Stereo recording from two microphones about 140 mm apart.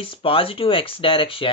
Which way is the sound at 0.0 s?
40° left (ahead or behind).